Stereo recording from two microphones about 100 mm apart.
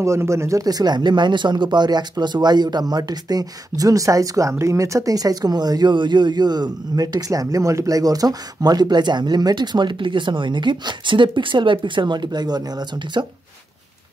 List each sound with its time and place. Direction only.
0.0 s speech: 30° right (ahead or behind)